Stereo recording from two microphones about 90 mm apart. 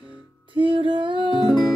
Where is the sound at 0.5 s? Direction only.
70° right (ahead or behind).